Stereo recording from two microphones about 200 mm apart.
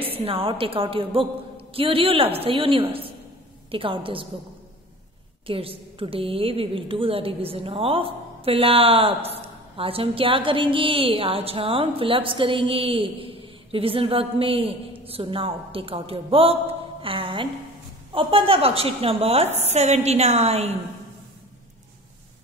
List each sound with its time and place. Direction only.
0.0 s a woman's voice: 25° right (ahead or behind)
5.5 s a woman's voice: 25° right (ahead or behind)